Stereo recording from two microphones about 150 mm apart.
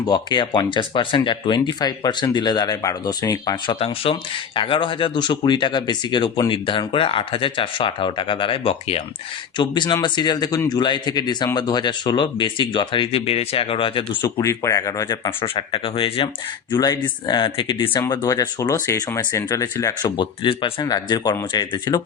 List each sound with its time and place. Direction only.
0.0 s speech: 30° left (ahead or behind)
14.4 s speech: 20° left (ahead or behind)
15.4 s speech: 35° left (ahead or behind)
16.7 s speech: 25° left (ahead or behind)